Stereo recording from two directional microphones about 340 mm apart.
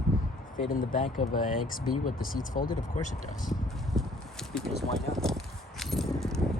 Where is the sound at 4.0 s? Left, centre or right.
Centre.